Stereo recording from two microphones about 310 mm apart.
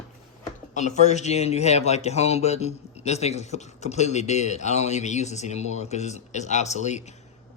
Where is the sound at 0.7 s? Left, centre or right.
Left.